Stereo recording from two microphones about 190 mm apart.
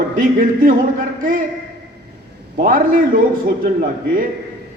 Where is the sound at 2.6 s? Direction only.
45° right (ahead or behind).